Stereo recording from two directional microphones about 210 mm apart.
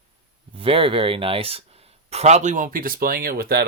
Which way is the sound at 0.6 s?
25° right (ahead or behind).